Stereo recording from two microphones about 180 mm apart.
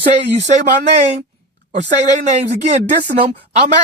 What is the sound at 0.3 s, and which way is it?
Speech, 40° right (ahead or behind).